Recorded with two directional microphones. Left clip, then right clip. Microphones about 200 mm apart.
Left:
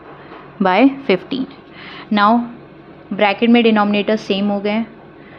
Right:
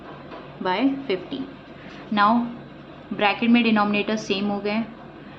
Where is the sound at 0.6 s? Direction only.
60° left (ahead or behind).